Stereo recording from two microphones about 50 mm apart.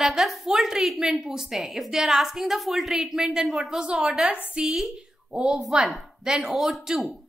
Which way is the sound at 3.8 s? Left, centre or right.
Centre.